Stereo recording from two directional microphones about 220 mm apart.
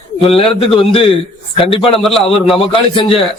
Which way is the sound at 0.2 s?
25° left (ahead or behind).